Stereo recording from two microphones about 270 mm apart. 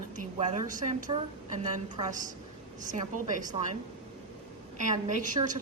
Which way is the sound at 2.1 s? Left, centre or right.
Right.